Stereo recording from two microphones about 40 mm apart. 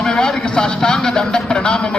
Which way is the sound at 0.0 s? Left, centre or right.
Centre.